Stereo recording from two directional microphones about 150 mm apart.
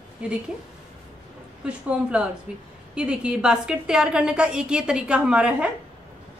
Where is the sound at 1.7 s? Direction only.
5° right (ahead or behind).